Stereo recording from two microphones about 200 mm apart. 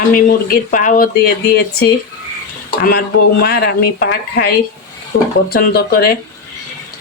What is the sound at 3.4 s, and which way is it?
Speech, 50° left (ahead or behind).